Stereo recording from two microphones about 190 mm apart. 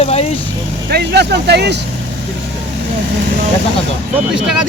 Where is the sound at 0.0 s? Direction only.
35° left (ahead or behind).